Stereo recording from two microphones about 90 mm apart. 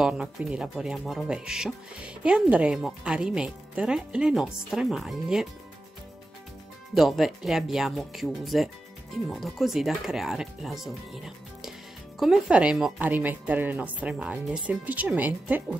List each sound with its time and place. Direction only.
0.0 s speech: 10° right (ahead or behind)
6.9 s speech: centre (ahead or behind)
13.0 s speech: 20° right (ahead or behind)